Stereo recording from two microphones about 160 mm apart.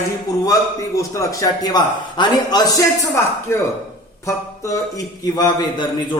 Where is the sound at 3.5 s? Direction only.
15° left (ahead or behind).